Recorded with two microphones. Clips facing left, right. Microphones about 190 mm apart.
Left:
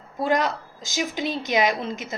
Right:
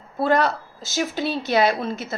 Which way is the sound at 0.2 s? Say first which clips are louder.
Right 3 dB; 15° left (ahead or behind).